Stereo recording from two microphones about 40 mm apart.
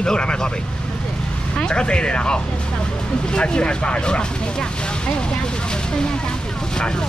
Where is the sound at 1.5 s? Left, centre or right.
Left.